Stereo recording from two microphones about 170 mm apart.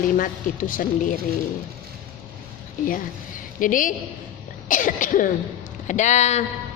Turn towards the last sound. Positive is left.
turn(degrees=40)  # may be behind; listen again after turning